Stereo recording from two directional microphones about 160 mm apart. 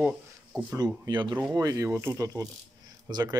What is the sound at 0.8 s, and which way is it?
Speech, 25° right (ahead or behind).